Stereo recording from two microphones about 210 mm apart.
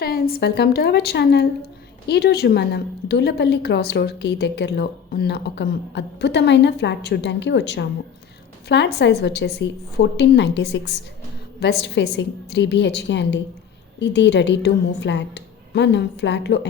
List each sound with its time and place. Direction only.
0.0 s a woman's voice: 45° left (ahead or behind)